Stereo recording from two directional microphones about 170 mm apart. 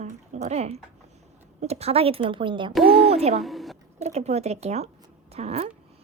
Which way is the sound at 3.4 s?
Centre (ahead or behind).